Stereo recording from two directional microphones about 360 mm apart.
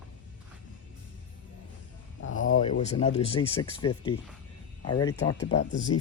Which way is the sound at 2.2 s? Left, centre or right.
Left.